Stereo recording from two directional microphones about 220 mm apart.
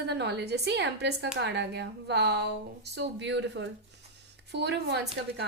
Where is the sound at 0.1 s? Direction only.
50° right (ahead or behind).